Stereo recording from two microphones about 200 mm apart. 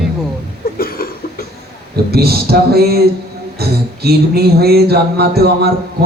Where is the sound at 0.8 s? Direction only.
50° left (ahead or behind).